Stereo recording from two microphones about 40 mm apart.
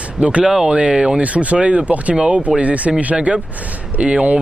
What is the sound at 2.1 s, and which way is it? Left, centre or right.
Speech, right.